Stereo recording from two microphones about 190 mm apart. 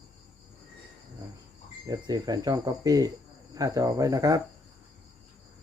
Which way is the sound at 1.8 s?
20° right (ahead or behind).